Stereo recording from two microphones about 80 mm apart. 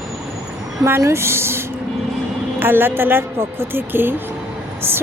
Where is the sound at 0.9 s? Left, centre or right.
Right.